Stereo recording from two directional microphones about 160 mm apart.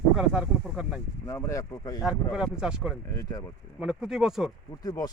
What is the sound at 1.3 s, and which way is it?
Speech, 20° left (ahead or behind).